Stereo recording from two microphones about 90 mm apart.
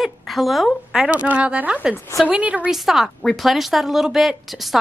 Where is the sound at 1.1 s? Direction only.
15° right (ahead or behind).